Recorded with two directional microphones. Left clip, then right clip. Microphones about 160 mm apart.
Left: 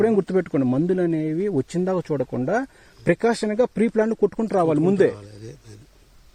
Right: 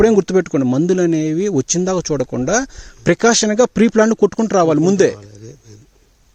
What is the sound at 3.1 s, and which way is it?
Speech, 85° right.